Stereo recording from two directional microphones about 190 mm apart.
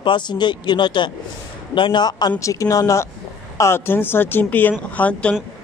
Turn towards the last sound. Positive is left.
turn(degrees=5)  # may be behind; listen again after turning